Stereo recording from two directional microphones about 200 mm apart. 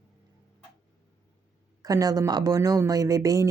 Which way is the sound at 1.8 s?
20° right (ahead or behind).